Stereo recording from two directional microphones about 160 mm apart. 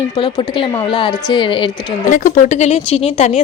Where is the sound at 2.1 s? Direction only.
50° left (ahead or behind).